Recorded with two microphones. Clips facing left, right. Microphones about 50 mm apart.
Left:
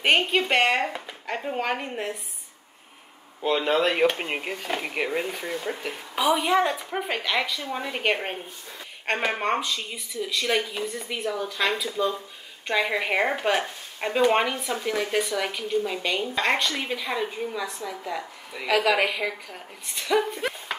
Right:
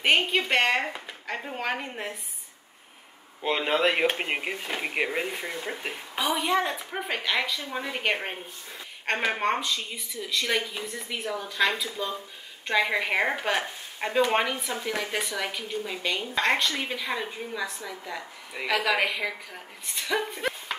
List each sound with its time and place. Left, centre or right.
0.0 s speech: centre
3.4 s speech: right
3.9 s speech: centre